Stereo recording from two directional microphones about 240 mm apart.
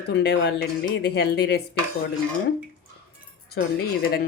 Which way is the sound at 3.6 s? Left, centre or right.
Left.